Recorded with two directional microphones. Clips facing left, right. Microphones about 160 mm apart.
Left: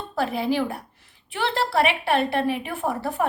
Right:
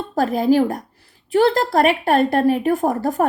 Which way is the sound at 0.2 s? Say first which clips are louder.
Right 7 dB; 40° right (ahead or behind).